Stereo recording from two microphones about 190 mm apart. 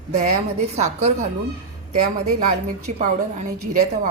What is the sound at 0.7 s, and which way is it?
Speech, 35° right (ahead or behind).